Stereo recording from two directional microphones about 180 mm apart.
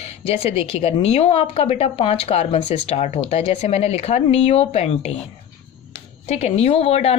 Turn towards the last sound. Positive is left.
turn(degrees=35)  # may be behind; listen again after turning